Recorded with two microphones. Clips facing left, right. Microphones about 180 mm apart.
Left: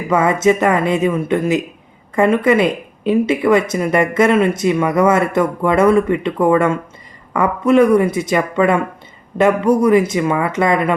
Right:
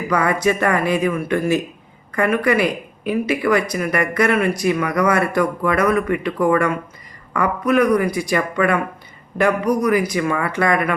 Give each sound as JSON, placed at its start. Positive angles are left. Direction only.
{"t": 0.1, "sound": "speech", "side_deg": 25}